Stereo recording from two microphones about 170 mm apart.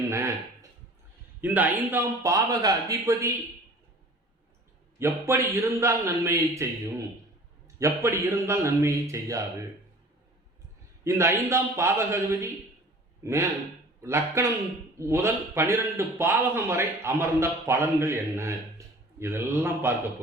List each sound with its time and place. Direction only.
1.4 s a man's voice: 10° right (ahead or behind)
4.9 s a man's voice: 15° right (ahead or behind)
7.8 s a man's voice: 15° right (ahead or behind)
11.0 s a man's voice: 15° right (ahead or behind)